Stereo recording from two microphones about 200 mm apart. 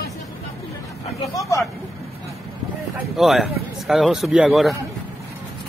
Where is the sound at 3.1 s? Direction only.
Centre (ahead or behind).